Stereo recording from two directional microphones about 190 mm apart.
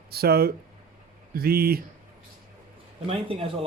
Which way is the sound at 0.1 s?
55° right (ahead or behind).